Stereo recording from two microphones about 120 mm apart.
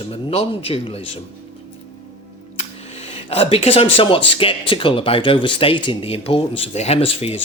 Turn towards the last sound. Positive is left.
turn(degrees=55)  # may be behind; listen again after turning